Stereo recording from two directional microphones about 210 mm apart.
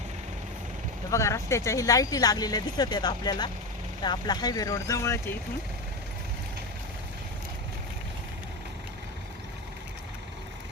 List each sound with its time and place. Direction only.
1.1 s speech: 15° left (ahead or behind)